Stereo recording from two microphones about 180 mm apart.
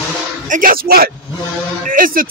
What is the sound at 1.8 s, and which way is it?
Music, 50° right (ahead or behind).